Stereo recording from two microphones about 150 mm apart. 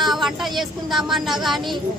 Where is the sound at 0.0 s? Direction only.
Centre (ahead or behind).